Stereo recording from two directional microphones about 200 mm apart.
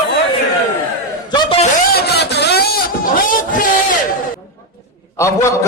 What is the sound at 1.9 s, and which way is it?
Vehicle, 55° left (ahead or behind).